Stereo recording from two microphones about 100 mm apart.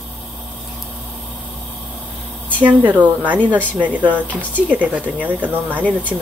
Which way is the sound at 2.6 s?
15° right (ahead or behind).